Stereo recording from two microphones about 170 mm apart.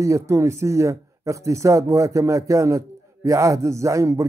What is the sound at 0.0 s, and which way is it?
Speech, 20° right (ahead or behind).